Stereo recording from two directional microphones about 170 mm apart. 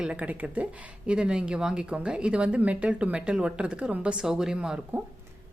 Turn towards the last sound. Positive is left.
turn(degrees=-5)  # may be behind; listen again after turning